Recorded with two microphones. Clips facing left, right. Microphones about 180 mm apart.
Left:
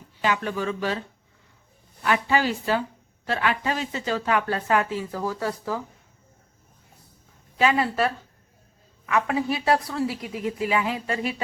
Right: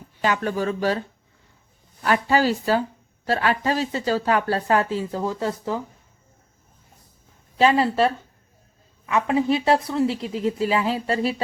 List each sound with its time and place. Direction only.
0.2 s speech: 40° right (ahead or behind)
2.0 s speech: 40° right (ahead or behind); by 5.8 s 20° right (ahead or behind)
7.6 s a woman's voice: 30° right (ahead or behind)